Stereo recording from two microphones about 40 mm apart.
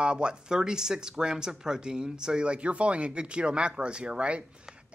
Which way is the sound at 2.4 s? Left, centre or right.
Right.